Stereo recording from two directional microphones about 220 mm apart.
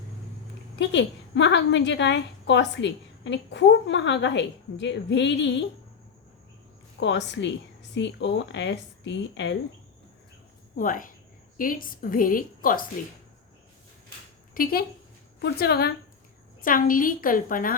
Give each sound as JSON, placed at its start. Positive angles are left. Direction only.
{"t": 0.8, "sound": "a woman's voice", "side_deg": 55}
{"t": 7.0, "sound": "a woman's voice", "side_deg": 55}
{"t": 10.8, "sound": "a woman's voice", "side_deg": 40}
{"t": 14.5, "sound": "a woman's voice", "side_deg": 40}